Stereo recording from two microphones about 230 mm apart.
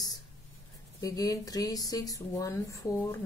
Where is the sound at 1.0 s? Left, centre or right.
Centre.